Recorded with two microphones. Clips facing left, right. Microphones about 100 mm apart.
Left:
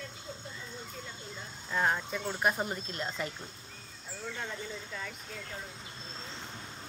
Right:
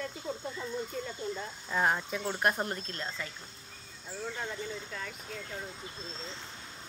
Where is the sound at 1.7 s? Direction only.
10° right (ahead or behind); by 3.3 s 20° left (ahead or behind).